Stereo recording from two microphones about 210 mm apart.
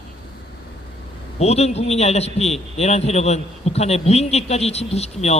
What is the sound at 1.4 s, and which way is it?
A man's voice, 30° left (ahead or behind).